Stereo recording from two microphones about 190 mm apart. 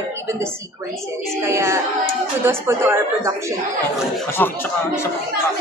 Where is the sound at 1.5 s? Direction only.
15° right (ahead or behind).